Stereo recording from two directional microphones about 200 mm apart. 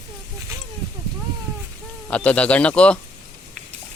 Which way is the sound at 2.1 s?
5° left (ahead or behind).